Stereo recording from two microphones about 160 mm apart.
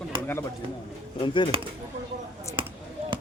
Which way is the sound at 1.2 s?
30° left (ahead or behind).